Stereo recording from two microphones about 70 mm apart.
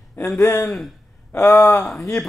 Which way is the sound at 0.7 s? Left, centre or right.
Centre.